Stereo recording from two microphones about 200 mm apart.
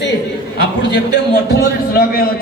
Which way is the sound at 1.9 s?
50° left (ahead or behind).